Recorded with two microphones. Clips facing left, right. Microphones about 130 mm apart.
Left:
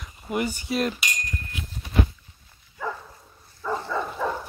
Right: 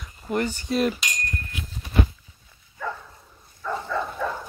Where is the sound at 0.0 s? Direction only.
10° left (ahead or behind).